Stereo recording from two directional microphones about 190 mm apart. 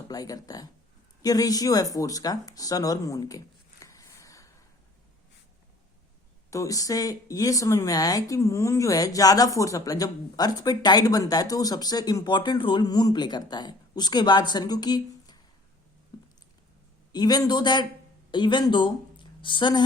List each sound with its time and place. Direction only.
0.1 s speech: 20° left (ahead or behind)
6.5 s speech: 15° left (ahead or behind)
16.1 s squish: 20° left (ahead or behind)
17.1 s speech: 20° left (ahead or behind)